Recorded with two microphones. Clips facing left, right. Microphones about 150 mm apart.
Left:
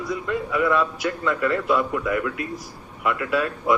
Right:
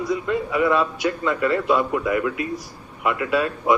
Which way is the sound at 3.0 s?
10° right (ahead or behind).